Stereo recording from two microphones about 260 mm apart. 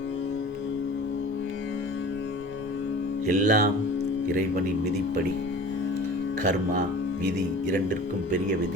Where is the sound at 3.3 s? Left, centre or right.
Right.